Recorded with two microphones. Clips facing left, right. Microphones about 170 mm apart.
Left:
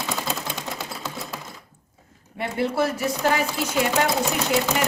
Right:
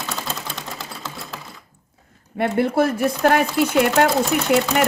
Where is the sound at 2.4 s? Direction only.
55° right (ahead or behind).